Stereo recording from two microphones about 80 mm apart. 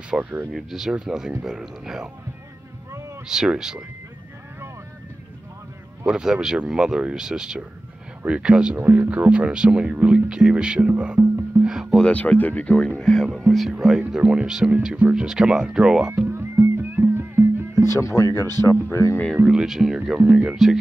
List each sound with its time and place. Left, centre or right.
0.2 s speech: right
0.5 s speech: centre
3.3 s speech: centre
6.0 s speech: centre
8.7 s speech: right
11.6 s music: centre
12.1 s speech: centre
16.1 s music: right
17.9 s speech: left
19.3 s speech: centre
20.2 s speech: centre
20.4 s speech: centre